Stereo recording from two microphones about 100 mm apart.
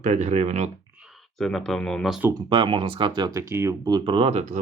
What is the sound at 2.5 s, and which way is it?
Speech, 60° right (ahead or behind).